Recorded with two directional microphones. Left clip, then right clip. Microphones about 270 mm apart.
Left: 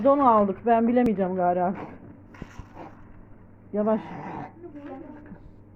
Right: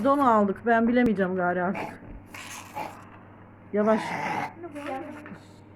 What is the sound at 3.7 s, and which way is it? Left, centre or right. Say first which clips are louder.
Speech: right 2 dB; centre.